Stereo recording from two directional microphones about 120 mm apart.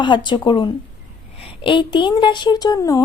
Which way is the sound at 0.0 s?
40° left (ahead or behind).